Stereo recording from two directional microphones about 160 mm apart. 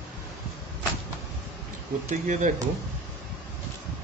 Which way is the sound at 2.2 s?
50° right (ahead or behind).